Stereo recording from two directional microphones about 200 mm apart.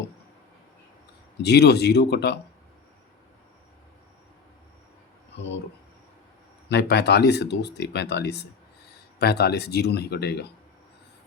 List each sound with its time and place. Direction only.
1.4 s speech: 55° left (ahead or behind)
6.7 s speech: 55° left (ahead or behind)